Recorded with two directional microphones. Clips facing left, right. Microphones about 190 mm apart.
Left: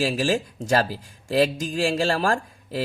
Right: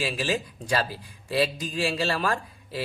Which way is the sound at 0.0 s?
45° left (ahead or behind).